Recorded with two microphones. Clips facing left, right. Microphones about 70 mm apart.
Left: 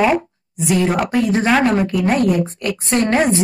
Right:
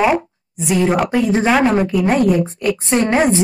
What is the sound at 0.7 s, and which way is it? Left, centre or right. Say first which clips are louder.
A woman's voice: right 1 dB; right.